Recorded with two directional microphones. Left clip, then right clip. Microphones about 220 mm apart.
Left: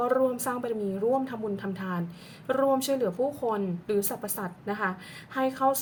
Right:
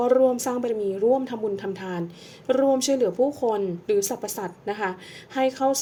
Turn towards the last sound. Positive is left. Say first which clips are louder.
# right 3 dB
turn(degrees=-20)  # may be behind; listen again after turning